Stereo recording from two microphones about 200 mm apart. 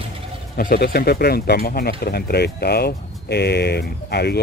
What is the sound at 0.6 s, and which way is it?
Speech, 45° left (ahead or behind).